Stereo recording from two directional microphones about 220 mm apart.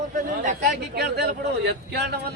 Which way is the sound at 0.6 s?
50° right (ahead or behind).